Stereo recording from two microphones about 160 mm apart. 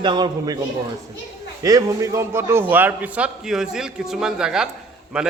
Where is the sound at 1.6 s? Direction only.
20° right (ahead or behind); by 5.3 s 5° right (ahead or behind).